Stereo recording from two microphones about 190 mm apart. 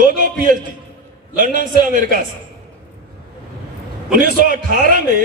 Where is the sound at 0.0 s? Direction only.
45° right (ahead or behind).